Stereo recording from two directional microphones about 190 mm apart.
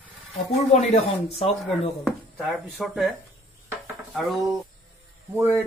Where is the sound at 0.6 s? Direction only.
35° left (ahead or behind).